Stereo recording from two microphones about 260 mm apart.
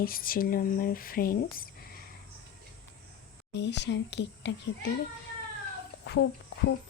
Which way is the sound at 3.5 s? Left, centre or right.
Left.